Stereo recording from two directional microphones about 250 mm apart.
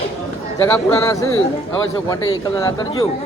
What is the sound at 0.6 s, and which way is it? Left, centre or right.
Speech, centre.